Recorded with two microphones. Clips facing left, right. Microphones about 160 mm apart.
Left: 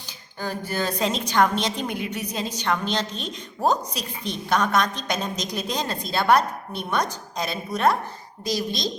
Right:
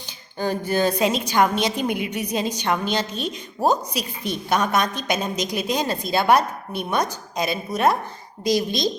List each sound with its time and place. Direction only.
0.3 s a woman's voice: 20° right (ahead or behind)